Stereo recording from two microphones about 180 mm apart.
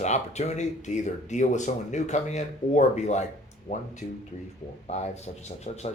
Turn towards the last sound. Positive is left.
turn(degrees=40)  # may be behind; listen again after turning